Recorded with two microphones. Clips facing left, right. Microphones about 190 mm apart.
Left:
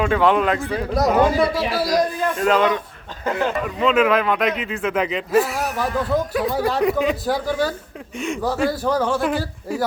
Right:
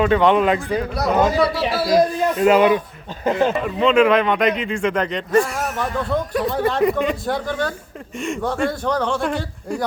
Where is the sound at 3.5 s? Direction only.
Centre (ahead or behind).